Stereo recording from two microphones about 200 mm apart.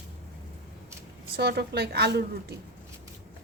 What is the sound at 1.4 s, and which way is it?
A woman's voice, 55° right (ahead or behind).